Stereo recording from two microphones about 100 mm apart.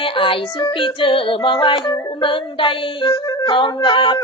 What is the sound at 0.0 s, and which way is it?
Music, 60° left (ahead or behind).